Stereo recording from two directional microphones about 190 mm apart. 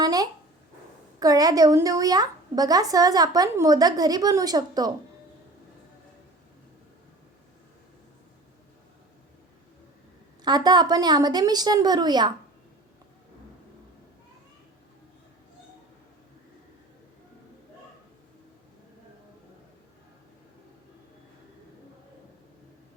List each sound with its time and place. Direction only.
0.0 s a sound: 20° right (ahead or behind)
1.2 s speech: 20° right (ahead or behind)
10.4 s speech: 20° right (ahead or behind)